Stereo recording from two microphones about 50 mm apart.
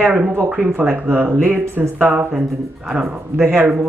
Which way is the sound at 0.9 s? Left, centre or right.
Right.